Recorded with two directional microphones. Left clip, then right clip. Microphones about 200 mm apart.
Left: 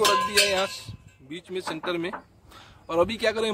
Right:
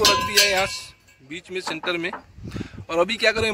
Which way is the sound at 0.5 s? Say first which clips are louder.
Right 4 dB; centre (ahead or behind).